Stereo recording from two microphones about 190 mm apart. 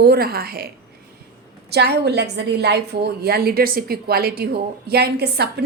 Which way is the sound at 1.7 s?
60° right (ahead or behind).